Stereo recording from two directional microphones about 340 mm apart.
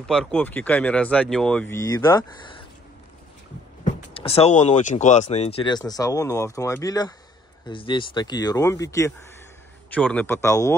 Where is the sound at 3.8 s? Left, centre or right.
Centre.